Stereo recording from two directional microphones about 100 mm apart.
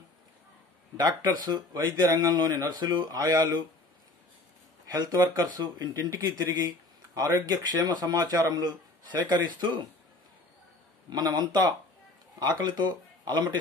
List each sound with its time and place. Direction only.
0.9 s speech: 45° right (ahead or behind)
4.8 s speech: 35° right (ahead or behind)
11.1 s speech: 45° right (ahead or behind)